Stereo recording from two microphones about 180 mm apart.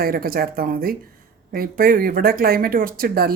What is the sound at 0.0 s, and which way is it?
Speech, 55° right (ahead or behind).